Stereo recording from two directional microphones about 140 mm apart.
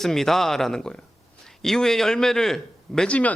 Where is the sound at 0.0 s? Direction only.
Centre (ahead or behind).